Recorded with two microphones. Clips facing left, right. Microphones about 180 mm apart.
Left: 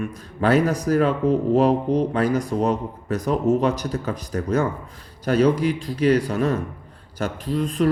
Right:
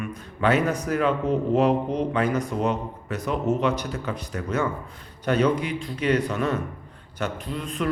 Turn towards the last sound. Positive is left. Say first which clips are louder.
# left 7 dB
turn(degrees=35)  # may be behind; listen again after turning